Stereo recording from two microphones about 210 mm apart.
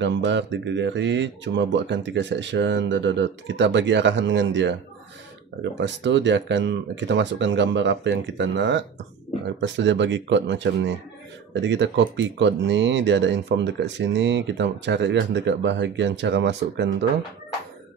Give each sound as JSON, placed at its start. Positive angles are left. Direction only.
{"t": 0.0, "sound": "speech", "side_deg": -60}